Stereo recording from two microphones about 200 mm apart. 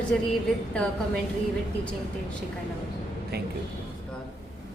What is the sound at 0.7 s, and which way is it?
Speech, 5° left (ahead or behind).